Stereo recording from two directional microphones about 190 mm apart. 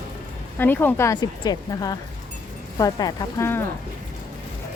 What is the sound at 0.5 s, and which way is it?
Speech, 10° left (ahead or behind).